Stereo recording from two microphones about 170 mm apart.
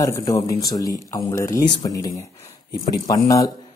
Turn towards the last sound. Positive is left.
turn(degrees=20)  # may be behind; listen again after turning